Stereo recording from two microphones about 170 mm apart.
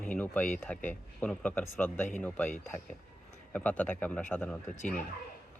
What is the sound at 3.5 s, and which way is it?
Speech, 10° left (ahead or behind).